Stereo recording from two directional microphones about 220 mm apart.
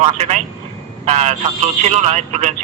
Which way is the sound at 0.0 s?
30° right (ahead or behind).